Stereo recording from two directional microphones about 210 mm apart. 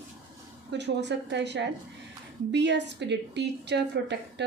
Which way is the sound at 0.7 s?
55° right (ahead or behind).